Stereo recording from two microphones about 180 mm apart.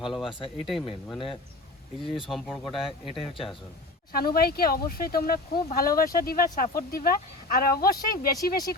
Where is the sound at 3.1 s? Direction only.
30° left (ahead or behind).